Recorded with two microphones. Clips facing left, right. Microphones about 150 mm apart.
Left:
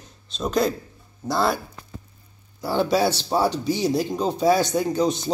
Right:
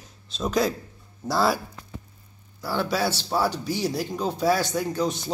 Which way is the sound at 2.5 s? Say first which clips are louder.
Left 5 dB; 20° left (ahead or behind).